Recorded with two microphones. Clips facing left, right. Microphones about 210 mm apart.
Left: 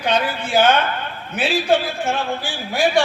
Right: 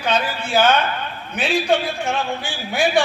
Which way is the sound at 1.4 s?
5° left (ahead or behind).